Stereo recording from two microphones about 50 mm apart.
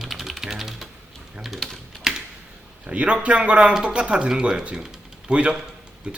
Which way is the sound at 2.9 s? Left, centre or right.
Right.